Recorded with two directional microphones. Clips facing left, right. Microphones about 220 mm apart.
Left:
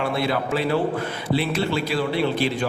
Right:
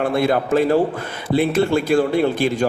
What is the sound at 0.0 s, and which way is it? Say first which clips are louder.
A man's voice: right 5 dB; 50° right (ahead or behind).